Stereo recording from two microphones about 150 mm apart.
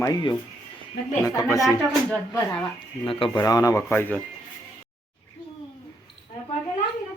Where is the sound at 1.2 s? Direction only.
20° left (ahead or behind).